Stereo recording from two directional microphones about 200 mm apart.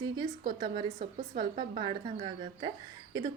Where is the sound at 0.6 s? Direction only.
25° right (ahead or behind).